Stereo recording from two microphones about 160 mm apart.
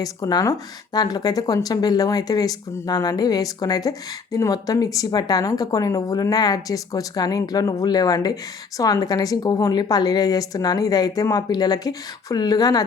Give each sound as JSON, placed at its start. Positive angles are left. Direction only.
{"t": 0.0, "sound": "speech", "side_deg": 25}